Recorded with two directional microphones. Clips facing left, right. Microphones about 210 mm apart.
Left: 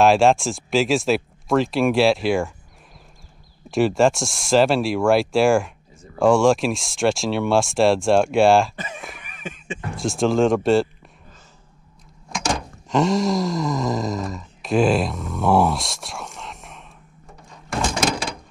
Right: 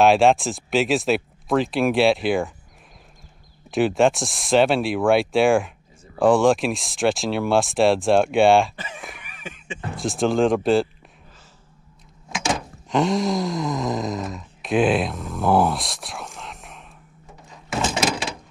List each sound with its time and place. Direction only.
0.0 s speech: centre (ahead or behind)
3.7 s speech: centre (ahead or behind)
9.8 s speech: centre (ahead or behind)
12.3 s a sound: 5° right (ahead or behind)